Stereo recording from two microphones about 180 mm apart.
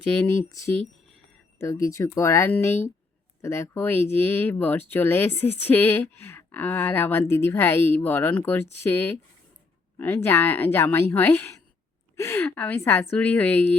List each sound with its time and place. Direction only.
0.3 s speech: 15° left (ahead or behind)